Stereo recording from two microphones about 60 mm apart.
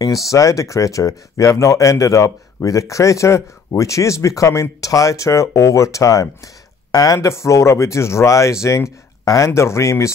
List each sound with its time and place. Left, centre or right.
0.0 s speech: left
6.9 s speech: left